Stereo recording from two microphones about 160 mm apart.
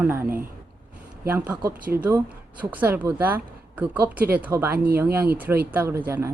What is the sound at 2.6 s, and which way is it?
A woman's voice, 10° right (ahead or behind).